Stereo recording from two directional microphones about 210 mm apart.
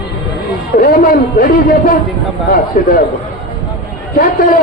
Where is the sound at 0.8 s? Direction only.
40° left (ahead or behind).